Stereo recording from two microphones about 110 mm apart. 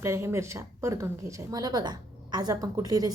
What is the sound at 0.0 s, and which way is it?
A woman's voice, 25° right (ahead or behind).